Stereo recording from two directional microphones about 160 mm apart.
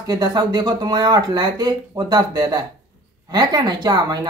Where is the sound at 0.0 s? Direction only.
25° right (ahead or behind).